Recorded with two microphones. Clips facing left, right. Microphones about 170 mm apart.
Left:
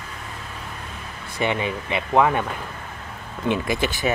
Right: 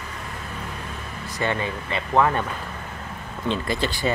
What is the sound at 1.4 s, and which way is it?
Speech, 15° left (ahead or behind).